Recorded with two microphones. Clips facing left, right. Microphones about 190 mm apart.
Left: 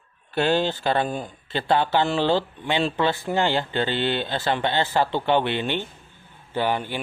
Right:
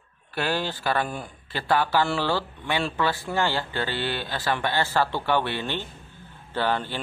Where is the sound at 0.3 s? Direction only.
25° left (ahead or behind).